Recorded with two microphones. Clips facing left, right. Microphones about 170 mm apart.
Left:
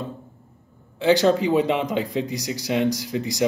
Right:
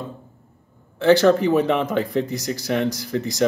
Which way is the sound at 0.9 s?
15° left (ahead or behind).